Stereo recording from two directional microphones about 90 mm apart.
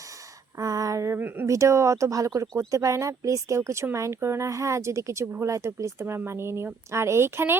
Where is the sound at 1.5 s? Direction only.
35° right (ahead or behind).